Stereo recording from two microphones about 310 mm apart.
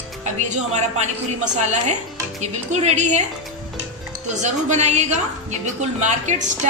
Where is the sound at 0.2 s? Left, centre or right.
Right.